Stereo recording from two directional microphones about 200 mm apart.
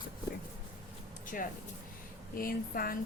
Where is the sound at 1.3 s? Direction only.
45° left (ahead or behind).